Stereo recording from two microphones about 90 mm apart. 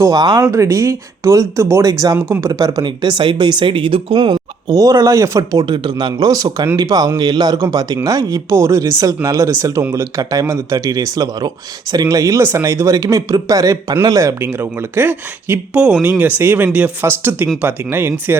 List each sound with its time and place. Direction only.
0.1 s speech: 50° right (ahead or behind)
0.4 s speech: 35° right (ahead or behind); by 4.2 s 75° right (ahead or behind)
4.2 s speech: 45° right (ahead or behind); by 18.3 s 25° right (ahead or behind)